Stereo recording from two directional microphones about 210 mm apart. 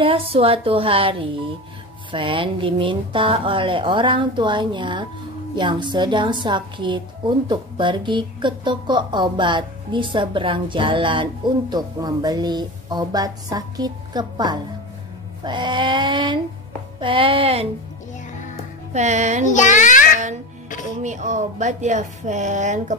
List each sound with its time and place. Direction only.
0.0 s a woman's voice: 25° right (ahead or behind)
18.9 s speech: 35° right (ahead or behind)
19.5 s a child's voice: 35° left (ahead or behind)
21.0 s speech: 35° right (ahead or behind)